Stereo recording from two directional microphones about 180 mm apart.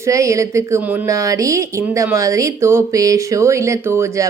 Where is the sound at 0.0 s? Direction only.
15° right (ahead or behind).